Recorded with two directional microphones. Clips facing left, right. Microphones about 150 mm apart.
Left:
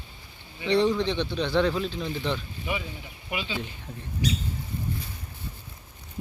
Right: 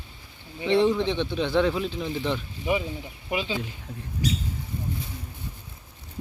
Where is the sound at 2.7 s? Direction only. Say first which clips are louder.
Right 7 dB; 30° right (ahead or behind).